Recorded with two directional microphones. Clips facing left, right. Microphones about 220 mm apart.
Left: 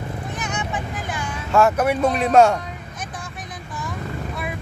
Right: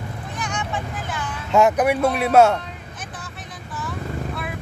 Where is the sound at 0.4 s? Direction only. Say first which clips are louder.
Right 2 dB; 20° left (ahead or behind).